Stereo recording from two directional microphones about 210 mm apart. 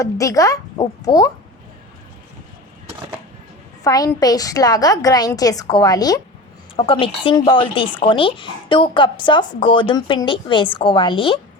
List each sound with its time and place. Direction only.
0.0 s a woman's voice: 15° left (ahead or behind)
3.8 s a woman's voice: 15° left (ahead or behind)